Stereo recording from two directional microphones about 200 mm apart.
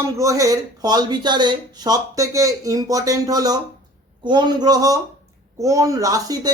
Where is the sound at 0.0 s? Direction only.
15° right (ahead or behind).